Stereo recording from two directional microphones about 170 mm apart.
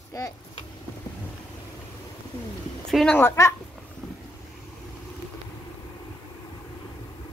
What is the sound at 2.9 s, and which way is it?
Speech, 5° left (ahead or behind).